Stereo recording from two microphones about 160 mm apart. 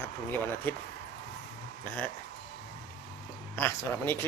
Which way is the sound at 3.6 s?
15° left (ahead or behind).